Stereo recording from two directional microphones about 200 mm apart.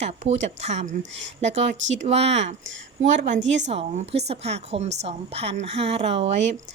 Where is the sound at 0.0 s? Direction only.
35° right (ahead or behind).